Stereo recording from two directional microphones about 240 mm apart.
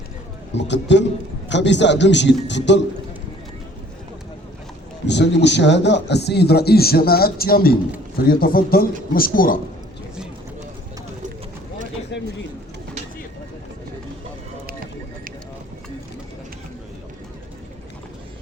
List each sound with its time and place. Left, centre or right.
0.5 s speech: left
5.0 s a man's voice: left
12.1 s bird: left